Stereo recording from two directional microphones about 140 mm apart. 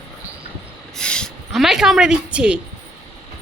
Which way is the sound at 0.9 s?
5° left (ahead or behind).